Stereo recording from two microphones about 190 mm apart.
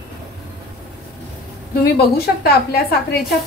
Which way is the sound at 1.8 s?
55° left (ahead or behind).